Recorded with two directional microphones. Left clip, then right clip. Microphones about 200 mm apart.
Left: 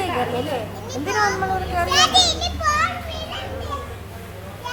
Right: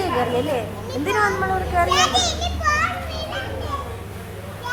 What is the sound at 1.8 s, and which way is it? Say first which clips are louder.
Children playing: left 6 dB; centre (ahead or behind).